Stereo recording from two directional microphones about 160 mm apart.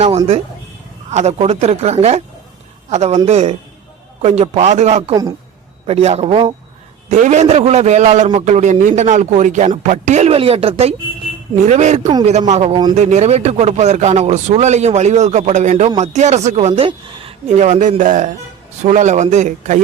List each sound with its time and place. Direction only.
1.1 s a man's voice: 40° right (ahead or behind)
7.1 s a man's voice: 45° right (ahead or behind)